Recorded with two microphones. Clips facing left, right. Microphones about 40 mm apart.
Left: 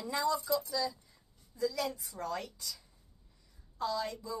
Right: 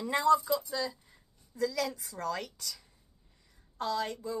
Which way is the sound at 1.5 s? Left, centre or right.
Right.